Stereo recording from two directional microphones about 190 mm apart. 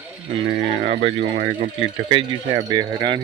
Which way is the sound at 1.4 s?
55° right (ahead or behind).